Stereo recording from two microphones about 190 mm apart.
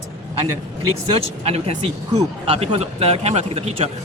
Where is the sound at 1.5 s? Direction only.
30° right (ahead or behind).